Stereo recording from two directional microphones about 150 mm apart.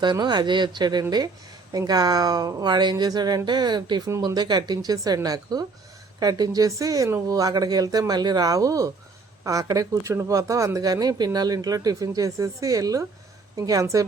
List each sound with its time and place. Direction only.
0.0 s speech: 30° right (ahead or behind)